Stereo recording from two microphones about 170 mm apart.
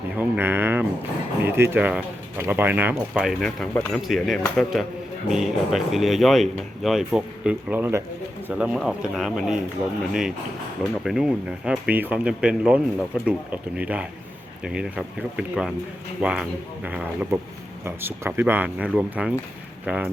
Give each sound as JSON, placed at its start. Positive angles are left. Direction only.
{"t": 0.2, "sound": "speech", "side_deg": -10}